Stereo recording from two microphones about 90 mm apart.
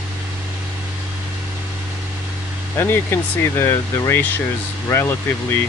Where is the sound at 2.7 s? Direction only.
25° left (ahead or behind).